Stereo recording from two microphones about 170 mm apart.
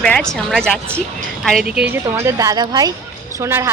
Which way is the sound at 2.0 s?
15° right (ahead or behind).